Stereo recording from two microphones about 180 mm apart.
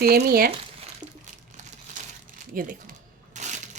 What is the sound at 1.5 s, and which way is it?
Crumpling, 40° right (ahead or behind).